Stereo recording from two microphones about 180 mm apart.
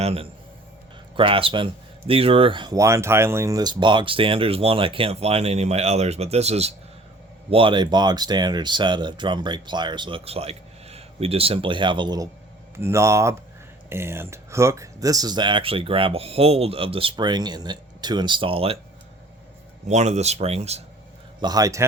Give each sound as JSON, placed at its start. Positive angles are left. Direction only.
{"t": 0.0, "sound": "a man's voice", "side_deg": -35}
{"t": 19.9, "sound": "speech", "side_deg": -40}
{"t": 21.4, "sound": "speech", "side_deg": -20}